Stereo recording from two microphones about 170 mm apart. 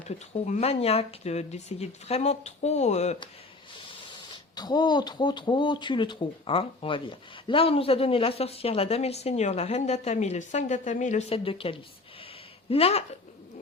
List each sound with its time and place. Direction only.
0.4 s speech: 40° left (ahead or behind)
4.5 s speech: 25° left (ahead or behind)